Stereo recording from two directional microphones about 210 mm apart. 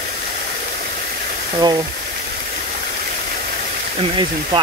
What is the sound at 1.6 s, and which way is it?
Speech, 20° right (ahead or behind).